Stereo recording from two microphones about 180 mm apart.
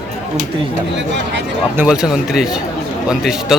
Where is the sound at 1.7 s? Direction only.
5° right (ahead or behind).